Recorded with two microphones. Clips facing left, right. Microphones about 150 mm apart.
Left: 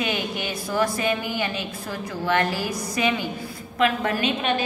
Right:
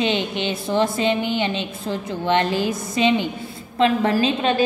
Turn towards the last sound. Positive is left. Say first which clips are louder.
# right 5 dB
turn(degrees=-30)  # may be behind; listen again after turning